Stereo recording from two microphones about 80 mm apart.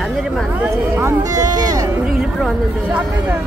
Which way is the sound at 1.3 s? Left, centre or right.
Right.